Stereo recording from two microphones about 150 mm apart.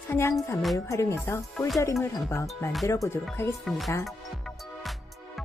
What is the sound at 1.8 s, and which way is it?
A woman's voice, 20° left (ahead or behind).